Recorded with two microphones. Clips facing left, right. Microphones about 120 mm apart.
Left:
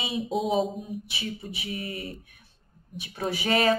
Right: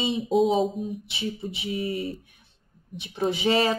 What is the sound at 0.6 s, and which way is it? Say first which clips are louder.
Speech: right 5 dB; centre (ahead or behind).